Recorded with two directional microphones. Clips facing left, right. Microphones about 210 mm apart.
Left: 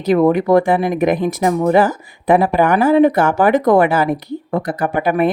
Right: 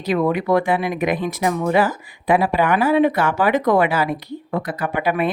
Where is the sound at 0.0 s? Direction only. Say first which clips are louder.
Left 6 dB; 45° left (ahead or behind).